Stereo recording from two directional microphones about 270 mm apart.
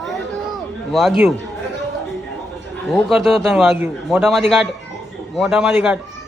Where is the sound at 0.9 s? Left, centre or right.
Centre.